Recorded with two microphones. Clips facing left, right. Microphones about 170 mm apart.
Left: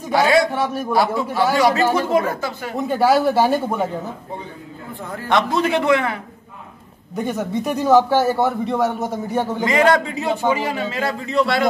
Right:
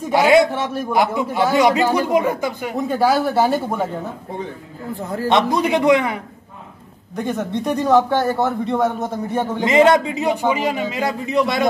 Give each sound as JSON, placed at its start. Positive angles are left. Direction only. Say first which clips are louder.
{"t": 0.1, "sound": "a man's voice", "louder": "right 3 dB", "side_deg": -20}
{"t": 0.5, "sound": "speech", "louder": "left 1 dB", "side_deg": 0}
{"t": 0.9, "sound": "a man's voice", "louder": "right 1 dB", "side_deg": -20}
{"t": 2.7, "sound": "speech", "louder": "left 2 dB", "side_deg": 0}
{"t": 5.1, "sound": "a man's voice", "louder": "right 2 dB", "side_deg": -20}
{"t": 7.2, "sound": "speech", "louder": "even", "side_deg": 5}
{"t": 9.6, "sound": "a man's voice", "louder": "right 4 dB", "side_deg": -20}